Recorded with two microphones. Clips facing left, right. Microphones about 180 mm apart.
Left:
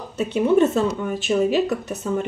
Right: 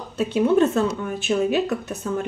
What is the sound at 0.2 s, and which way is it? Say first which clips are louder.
Speech: left 1 dB; centre (ahead or behind).